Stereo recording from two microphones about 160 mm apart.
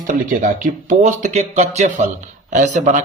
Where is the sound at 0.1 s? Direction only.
55° right (ahead or behind).